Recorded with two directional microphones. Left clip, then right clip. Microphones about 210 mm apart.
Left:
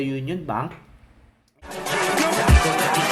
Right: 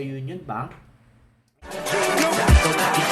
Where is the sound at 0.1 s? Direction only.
45° left (ahead or behind).